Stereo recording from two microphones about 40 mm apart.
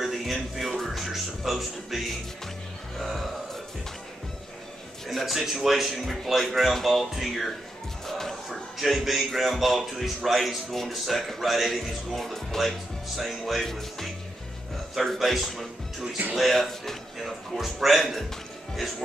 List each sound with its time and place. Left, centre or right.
0.0 s a man's voice: centre
5.0 s a man's voice: centre
8.1 s music: centre
8.7 s a man's voice: centre
15.1 s a man's voice: centre